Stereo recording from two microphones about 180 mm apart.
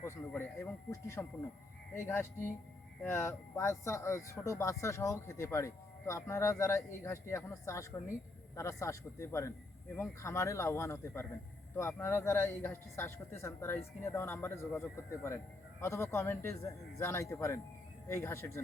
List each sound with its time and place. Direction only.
0.0 s speech: 15° left (ahead or behind)